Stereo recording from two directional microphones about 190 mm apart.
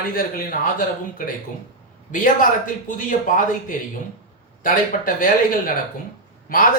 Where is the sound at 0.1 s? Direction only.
50° left (ahead or behind).